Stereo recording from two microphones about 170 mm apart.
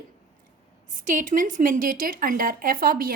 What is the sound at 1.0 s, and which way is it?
Speech, 50° right (ahead or behind).